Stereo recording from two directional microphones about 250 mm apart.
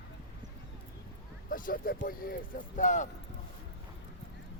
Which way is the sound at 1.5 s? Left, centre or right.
Left.